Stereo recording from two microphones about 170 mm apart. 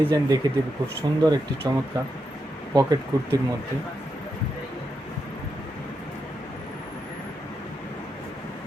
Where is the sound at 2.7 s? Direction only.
20° right (ahead or behind).